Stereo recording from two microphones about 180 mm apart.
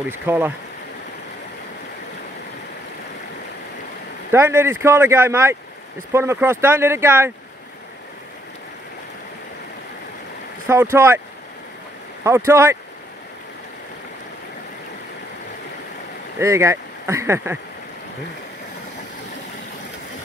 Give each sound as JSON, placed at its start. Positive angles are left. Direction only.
{"t": 0.1, "sound": "speech", "side_deg": -10}
{"t": 4.3, "sound": "speech", "side_deg": -15}
{"t": 10.7, "sound": "speech", "side_deg": -15}
{"t": 12.2, "sound": "speech", "side_deg": -15}
{"t": 16.3, "sound": "speech", "side_deg": -15}